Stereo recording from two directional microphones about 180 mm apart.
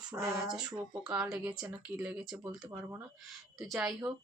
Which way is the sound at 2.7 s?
15° right (ahead or behind).